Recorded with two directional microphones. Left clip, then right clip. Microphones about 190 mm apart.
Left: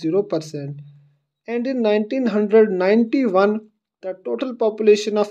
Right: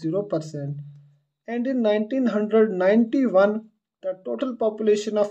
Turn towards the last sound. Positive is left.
turn(degrees=30)  # may be behind; listen again after turning